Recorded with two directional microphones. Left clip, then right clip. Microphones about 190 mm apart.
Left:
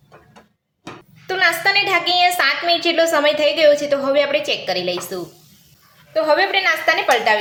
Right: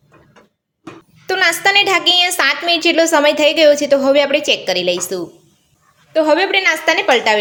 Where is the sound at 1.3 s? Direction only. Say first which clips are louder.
Right 3 dB; 50° right (ahead or behind).